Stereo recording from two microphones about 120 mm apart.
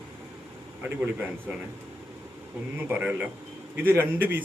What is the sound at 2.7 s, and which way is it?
A man's voice, 15° right (ahead or behind).